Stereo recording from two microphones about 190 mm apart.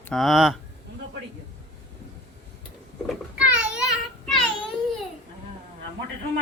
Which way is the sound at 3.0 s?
5° right (ahead or behind).